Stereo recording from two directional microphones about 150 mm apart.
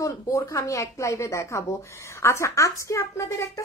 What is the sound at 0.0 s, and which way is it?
Speech, 20° left (ahead or behind).